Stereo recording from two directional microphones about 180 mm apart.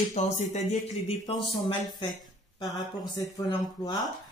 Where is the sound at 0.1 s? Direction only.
40° left (ahead or behind).